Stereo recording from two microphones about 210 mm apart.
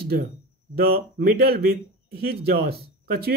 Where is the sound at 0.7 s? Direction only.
45° right (ahead or behind).